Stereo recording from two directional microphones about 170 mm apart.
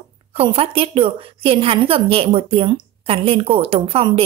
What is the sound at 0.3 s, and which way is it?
A woman's voice, 35° right (ahead or behind).